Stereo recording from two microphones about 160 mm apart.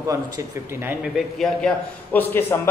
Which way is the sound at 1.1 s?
5° left (ahead or behind).